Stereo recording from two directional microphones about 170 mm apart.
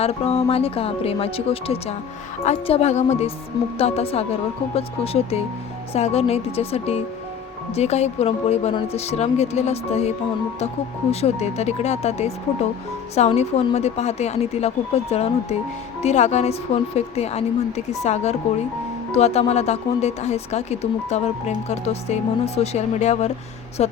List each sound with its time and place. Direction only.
0.0 s a woman's voice: 35° left (ahead or behind)
11.1 s a woman's voice: 40° left (ahead or behind)